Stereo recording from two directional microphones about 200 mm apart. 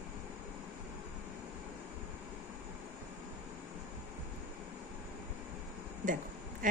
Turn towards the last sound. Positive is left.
turn(degrees=-40)  # may be behind; listen again after turning